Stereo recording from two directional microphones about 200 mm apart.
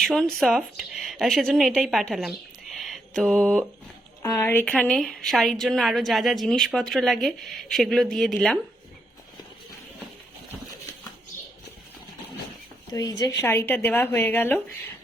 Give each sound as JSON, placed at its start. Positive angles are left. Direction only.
{"t": 0.0, "sound": "speech", "side_deg": 0}
{"t": 4.2, "sound": "a woman's voice", "side_deg": 15}
{"t": 12.9, "sound": "a woman's voice", "side_deg": 20}